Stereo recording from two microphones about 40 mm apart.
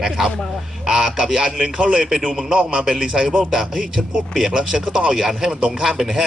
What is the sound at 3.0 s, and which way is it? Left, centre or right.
Speech, centre.